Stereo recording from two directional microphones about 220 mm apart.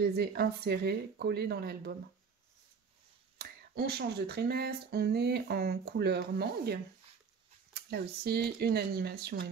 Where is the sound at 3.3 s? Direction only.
45° right (ahead or behind).